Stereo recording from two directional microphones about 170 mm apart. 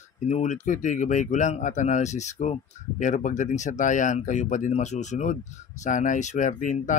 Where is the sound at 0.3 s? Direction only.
45° left (ahead or behind).